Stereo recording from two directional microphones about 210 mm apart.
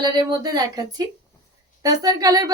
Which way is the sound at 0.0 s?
20° right (ahead or behind).